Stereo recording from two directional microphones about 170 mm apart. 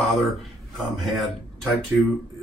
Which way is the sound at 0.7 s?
Centre (ahead or behind).